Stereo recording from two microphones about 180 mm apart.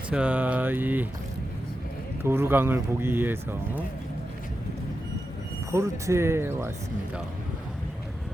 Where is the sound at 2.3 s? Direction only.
15° right (ahead or behind).